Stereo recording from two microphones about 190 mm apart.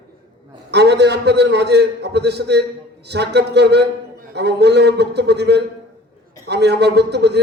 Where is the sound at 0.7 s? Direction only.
65° right (ahead or behind).